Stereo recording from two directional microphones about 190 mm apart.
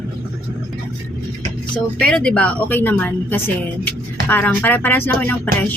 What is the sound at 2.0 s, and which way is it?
A woman's voice, 5° left (ahead or behind).